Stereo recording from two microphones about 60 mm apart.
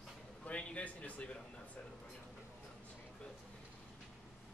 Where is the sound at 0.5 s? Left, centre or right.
Centre.